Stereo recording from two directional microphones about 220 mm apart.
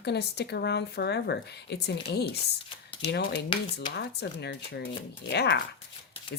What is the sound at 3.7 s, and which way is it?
Speech, 50° left (ahead or behind).